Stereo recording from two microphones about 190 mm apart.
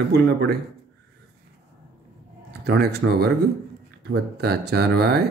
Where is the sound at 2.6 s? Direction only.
60° right (ahead or behind).